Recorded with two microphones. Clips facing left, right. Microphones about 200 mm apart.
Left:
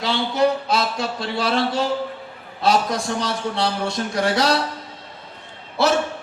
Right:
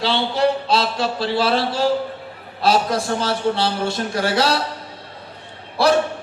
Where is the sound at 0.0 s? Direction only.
30° right (ahead or behind).